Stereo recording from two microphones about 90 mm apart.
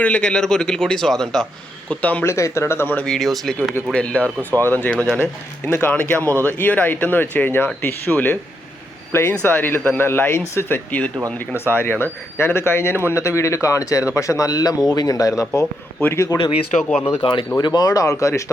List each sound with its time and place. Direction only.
0.0 s speech: 15° left (ahead or behind)
1.9 s speech: 15° left (ahead or behind)
2.2 s speech: 30° left (ahead or behind)
3.1 s speech: centre (ahead or behind)
3.9 s speech: 15° left (ahead or behind)
9.4 s speech: 20° left (ahead or behind)
17.6 s speech: 50° left (ahead or behind)